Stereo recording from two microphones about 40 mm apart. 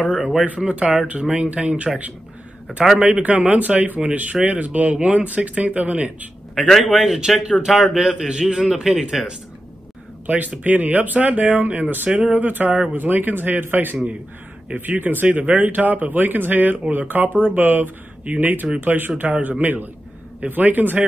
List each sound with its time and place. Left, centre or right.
0.1 s speech: centre
3.0 s speech: right
6.5 s a man's voice: centre
6.9 s a man's voice: centre
10.2 s speech: right
15.2 s speech: right
15.6 s speech: right